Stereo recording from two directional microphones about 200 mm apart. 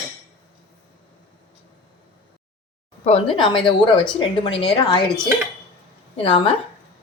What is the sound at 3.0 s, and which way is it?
Speech, 30° left (ahead or behind).